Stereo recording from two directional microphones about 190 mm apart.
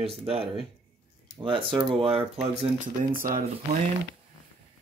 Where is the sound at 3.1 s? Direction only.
45° right (ahead or behind).